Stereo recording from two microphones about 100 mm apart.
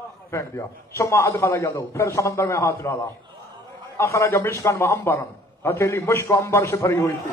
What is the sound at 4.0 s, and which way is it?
A man's voice, 30° left (ahead or behind).